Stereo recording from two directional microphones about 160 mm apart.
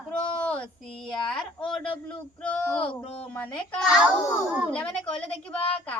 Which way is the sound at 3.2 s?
10° left (ahead or behind).